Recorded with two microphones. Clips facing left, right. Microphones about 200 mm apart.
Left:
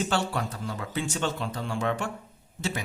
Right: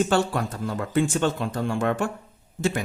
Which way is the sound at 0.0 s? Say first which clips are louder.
Right 6 dB; 50° right (ahead or behind).